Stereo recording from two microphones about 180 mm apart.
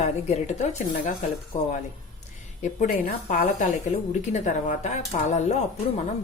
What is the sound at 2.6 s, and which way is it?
Speech, 45° left (ahead or behind).